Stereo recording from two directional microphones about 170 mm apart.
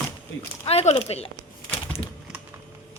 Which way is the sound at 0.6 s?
35° left (ahead or behind).